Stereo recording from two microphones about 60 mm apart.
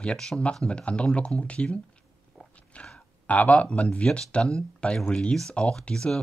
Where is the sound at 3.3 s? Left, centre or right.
Left.